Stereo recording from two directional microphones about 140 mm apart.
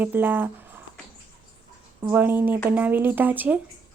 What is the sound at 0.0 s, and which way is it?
Speech, 15° right (ahead or behind).